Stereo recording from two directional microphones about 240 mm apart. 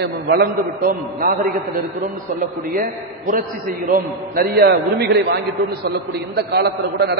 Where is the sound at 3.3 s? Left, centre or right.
Right.